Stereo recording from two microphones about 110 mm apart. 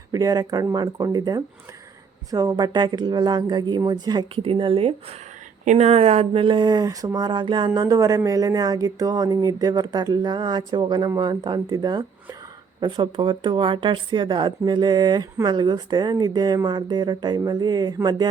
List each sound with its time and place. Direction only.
0.1 s speech: 35° right (ahead or behind)
4.4 s speech: 55° right (ahead or behind)
5.6 s speech: 75° right (ahead or behind); by 18.3 s 40° right (ahead or behind)